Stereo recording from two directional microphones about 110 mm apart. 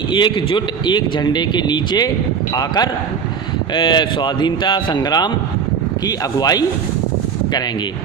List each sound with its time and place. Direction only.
0.1 s a man's voice: 45° left (ahead or behind)